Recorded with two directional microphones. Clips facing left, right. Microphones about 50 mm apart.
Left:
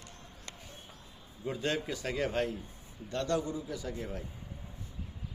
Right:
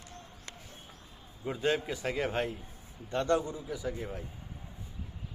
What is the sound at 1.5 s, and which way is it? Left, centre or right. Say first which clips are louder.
A man's voice: right 3 dB; centre.